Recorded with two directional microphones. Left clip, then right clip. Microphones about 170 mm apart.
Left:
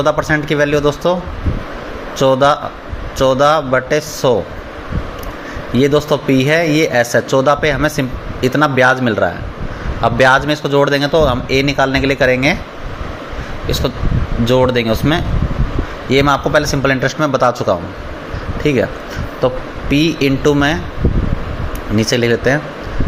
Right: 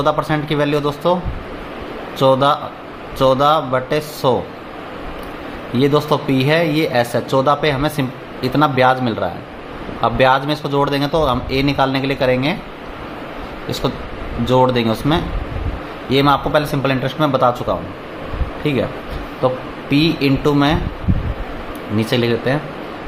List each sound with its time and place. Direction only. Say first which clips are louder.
0.0 s speech: left 3 dB; 20° left (ahead or behind)
2.1 s speech: left 2 dB; 20° left (ahead or behind)
5.7 s speech: left 2 dB; 20° left (ahead or behind)
13.7 s speech: left 3 dB; 15° left (ahead or behind)
21.9 s speech: left 4 dB; 25° left (ahead or behind)